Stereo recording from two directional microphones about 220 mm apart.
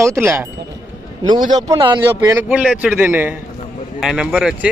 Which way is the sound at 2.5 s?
5° right (ahead or behind).